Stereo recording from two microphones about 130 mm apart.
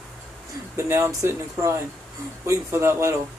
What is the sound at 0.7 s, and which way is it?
Speech, 25° right (ahead or behind).